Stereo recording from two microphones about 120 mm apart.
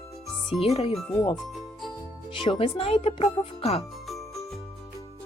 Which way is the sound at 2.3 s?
50° left (ahead or behind).